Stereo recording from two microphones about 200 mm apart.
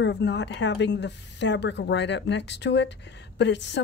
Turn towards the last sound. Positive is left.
turn(degrees=65)  # may be behind; listen again after turning